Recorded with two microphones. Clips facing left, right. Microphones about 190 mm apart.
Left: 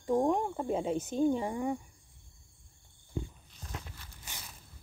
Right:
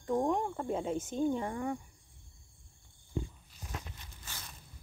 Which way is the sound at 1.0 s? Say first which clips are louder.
Left 3 dB; 15° left (ahead or behind).